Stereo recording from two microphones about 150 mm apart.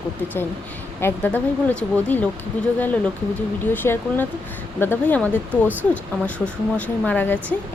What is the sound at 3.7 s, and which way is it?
A woman's voice, 15° left (ahead or behind).